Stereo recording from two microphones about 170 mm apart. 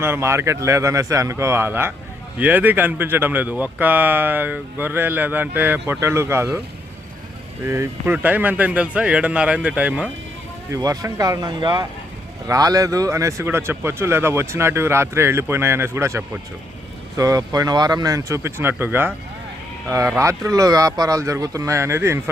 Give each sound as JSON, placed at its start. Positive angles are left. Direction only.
{"t": 0.0, "sound": "speech", "side_deg": -15}
{"t": 7.6, "sound": "speech", "side_deg": -15}
{"t": 10.7, "sound": "speech", "side_deg": -20}
{"t": 20.1, "sound": "speech", "side_deg": -20}